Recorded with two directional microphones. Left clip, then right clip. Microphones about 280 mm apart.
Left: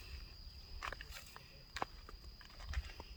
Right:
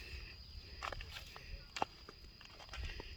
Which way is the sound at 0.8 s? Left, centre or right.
Right.